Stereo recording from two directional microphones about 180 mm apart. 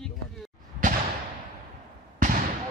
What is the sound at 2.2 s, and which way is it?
Basketball bounce, 50° right (ahead or behind).